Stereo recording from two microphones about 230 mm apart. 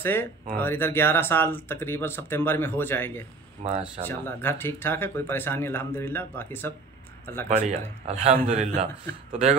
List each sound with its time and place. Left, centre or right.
0.0 s speech: centre
3.6 s a man's voice: right
4.1 s speech: centre
7.4 s a man's voice: right